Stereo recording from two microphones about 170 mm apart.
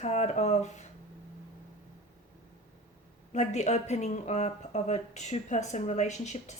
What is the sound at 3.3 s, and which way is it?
Speech, 45° left (ahead or behind).